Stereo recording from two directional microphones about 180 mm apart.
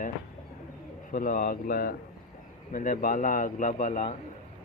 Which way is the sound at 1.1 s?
50° left (ahead or behind).